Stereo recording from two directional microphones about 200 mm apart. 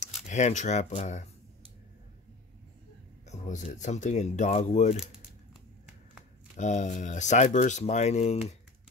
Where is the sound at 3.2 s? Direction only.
35° left (ahead or behind).